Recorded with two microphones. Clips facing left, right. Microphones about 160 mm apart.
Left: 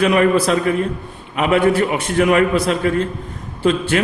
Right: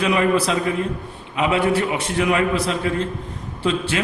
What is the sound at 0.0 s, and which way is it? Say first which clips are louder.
A man's voice: left 4 dB; 55° left (ahead or behind).